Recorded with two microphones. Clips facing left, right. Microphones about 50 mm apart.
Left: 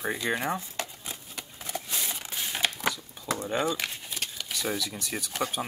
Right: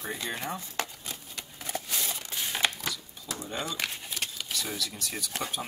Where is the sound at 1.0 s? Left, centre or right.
Centre.